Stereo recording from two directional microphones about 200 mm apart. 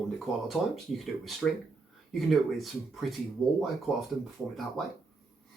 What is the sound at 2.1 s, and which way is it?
Speech, centre (ahead or behind).